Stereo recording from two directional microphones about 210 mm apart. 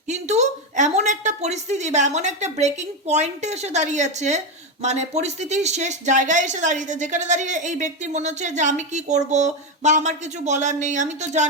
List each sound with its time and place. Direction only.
0.1 s speech: 35° right (ahead or behind)